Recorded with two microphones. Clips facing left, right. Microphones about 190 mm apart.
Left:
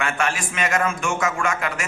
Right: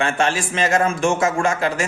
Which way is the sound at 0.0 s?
30° right (ahead or behind).